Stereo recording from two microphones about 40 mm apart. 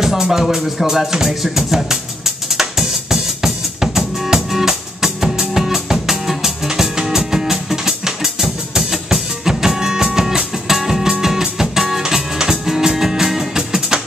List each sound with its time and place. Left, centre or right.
0.0 s music: centre
13.7 s music: centre